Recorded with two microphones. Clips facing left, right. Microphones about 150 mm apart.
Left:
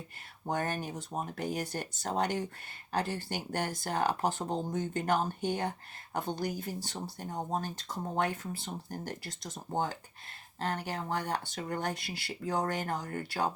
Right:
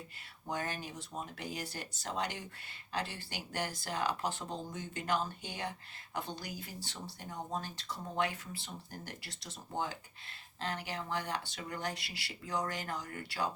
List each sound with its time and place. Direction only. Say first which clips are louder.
0.4 s speech: left 5 dB; 50° left (ahead or behind)